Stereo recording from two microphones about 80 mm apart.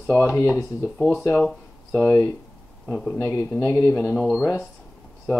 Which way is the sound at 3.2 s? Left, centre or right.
Left.